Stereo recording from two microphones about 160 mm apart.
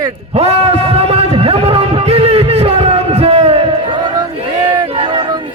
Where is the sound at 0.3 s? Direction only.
40° right (ahead or behind).